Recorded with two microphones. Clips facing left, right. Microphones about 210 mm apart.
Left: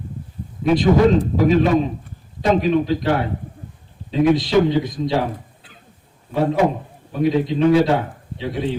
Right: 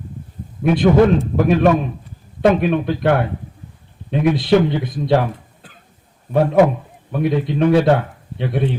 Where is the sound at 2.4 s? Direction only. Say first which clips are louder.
Right 2 dB; 60° right (ahead or behind).